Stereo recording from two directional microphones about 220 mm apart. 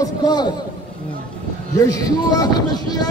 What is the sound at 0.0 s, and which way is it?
Speech, 20° left (ahead or behind).